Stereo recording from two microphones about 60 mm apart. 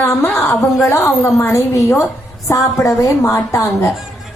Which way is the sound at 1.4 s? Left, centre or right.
Left.